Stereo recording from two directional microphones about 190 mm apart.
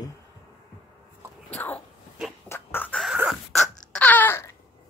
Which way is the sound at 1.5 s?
10° left (ahead or behind).